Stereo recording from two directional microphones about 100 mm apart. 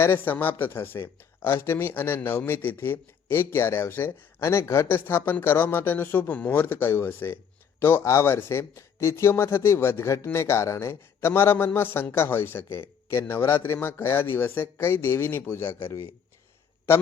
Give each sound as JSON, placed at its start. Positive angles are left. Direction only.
{"t": 0.0, "sound": "speech", "side_deg": 20}